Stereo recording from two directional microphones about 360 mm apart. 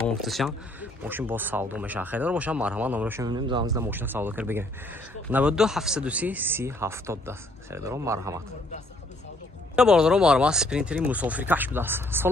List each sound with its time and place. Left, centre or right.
0.1 s speech: centre
9.7 s speech: centre